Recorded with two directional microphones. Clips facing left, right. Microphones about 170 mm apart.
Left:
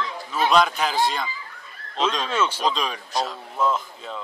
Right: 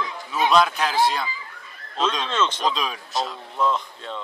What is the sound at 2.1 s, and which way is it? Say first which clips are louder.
Speech: even; 5° left (ahead or behind).